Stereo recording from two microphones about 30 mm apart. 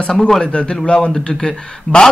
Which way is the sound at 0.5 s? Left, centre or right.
Left.